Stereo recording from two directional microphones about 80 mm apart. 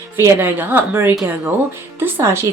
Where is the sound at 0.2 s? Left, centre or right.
Right.